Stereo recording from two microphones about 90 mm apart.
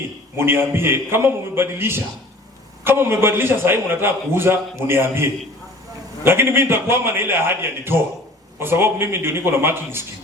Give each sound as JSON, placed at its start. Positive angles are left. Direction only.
{"t": 0.3, "sound": "a man's voice", "side_deg": -25}